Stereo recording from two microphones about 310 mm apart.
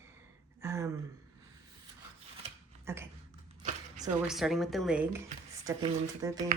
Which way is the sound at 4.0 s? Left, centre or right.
Centre.